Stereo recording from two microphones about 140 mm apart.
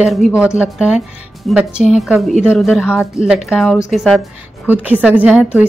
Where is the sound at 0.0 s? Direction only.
Centre (ahead or behind).